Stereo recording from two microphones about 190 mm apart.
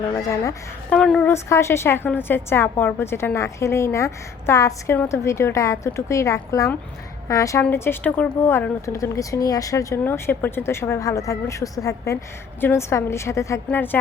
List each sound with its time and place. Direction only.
0.2 s a woman's voice: 15° left (ahead or behind)
0.9 s a woman's voice: centre (ahead or behind)
1.3 s a woman's voice: 15° left (ahead or behind)